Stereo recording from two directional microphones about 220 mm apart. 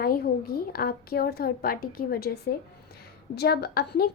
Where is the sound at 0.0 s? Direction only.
40° left (ahead or behind).